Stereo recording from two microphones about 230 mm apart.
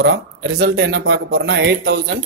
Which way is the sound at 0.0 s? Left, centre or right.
Right.